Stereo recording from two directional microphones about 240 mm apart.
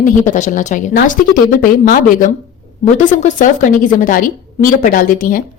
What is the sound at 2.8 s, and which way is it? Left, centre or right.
A woman's voice, left.